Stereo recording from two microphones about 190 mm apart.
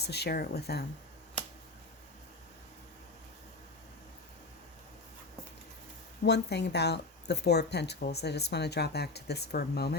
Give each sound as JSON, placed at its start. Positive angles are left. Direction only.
{"t": 0.0, "sound": "speech", "side_deg": 60}
{"t": 6.2, "sound": "speech", "side_deg": 65}